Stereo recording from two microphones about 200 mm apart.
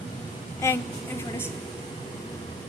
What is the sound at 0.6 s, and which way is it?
Speech, 15° left (ahead or behind).